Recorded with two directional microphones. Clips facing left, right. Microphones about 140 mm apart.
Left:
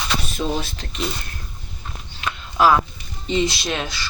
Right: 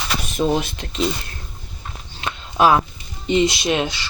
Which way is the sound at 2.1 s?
25° right (ahead or behind).